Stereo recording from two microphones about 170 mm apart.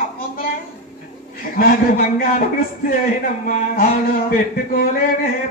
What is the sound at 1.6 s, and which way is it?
Speech, 60° left (ahead or behind).